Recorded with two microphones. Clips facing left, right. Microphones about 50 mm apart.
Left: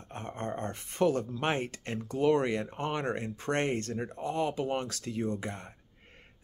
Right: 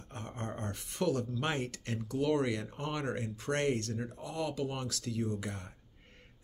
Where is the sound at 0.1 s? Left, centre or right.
Left.